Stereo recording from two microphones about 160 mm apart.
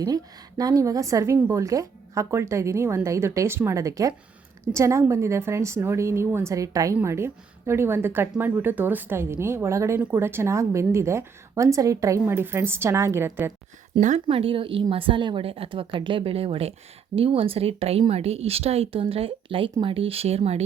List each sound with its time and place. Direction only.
0.0 s a woman's voice: 25° right (ahead or behind)
14.3 s a woman's voice: 35° right (ahead or behind)